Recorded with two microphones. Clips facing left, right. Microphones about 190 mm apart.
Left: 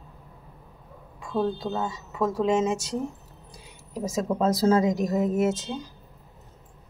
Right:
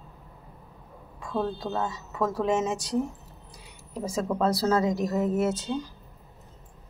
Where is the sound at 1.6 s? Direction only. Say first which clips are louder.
Left 1 dB; 20° left (ahead or behind).